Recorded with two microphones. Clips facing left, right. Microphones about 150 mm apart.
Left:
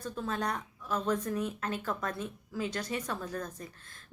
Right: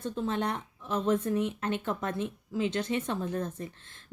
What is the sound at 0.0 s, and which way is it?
Speech, 25° right (ahead or behind).